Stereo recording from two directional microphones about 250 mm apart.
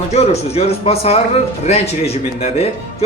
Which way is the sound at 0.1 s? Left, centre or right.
Left.